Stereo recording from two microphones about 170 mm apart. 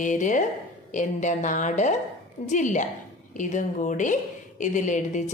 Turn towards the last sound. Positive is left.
turn(degrees=45)  # may be behind; listen again after turning